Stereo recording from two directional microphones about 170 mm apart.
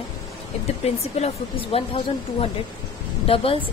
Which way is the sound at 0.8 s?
40° left (ahead or behind).